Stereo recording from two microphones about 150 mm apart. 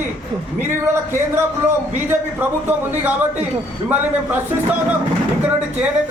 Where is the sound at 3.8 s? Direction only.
10° right (ahead or behind).